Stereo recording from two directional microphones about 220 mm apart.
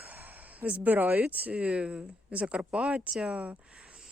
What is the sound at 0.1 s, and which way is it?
A woman's voice, 10° right (ahead or behind).